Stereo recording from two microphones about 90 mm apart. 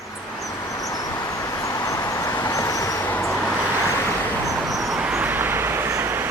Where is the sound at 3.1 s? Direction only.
25° left (ahead or behind).